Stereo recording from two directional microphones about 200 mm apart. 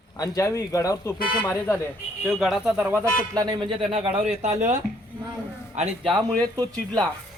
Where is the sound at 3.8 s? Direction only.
30° right (ahead or behind).